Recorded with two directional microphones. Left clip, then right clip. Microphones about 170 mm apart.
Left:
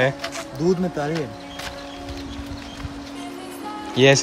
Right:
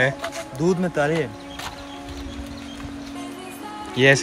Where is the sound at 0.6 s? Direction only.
45° right (ahead or behind).